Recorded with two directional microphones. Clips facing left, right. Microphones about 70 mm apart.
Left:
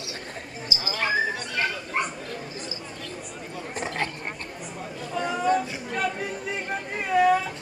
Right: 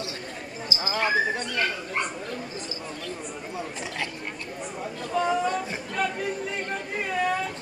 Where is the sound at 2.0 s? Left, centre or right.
Centre.